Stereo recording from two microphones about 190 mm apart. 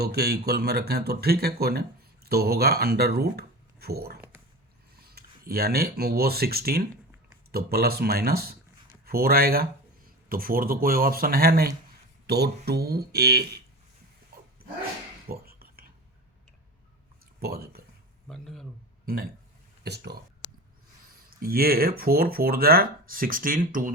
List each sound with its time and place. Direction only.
0.0 s speech: 55° right (ahead or behind)
5.0 s speech: 55° right (ahead or behind)
15.3 s whispering: 50° right (ahead or behind)
17.4 s speech: 55° right (ahead or behind)
18.3 s a sound: centre (ahead or behind)
19.8 s speech: 60° right (ahead or behind)
21.2 s speech: 55° right (ahead or behind)